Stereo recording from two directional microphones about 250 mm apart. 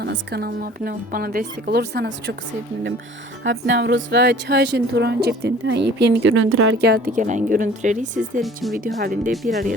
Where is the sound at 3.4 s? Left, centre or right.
Right.